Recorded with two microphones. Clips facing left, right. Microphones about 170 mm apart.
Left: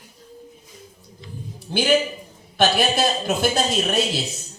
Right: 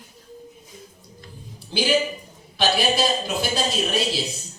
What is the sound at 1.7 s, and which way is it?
A man's voice, 55° left (ahead or behind).